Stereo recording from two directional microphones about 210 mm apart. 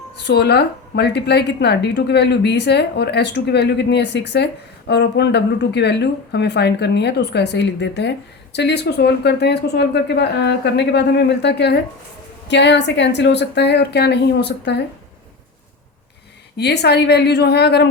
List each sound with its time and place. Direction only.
0.3 s a woman's voice: 50° left (ahead or behind)
16.6 s a woman's voice: 50° left (ahead or behind)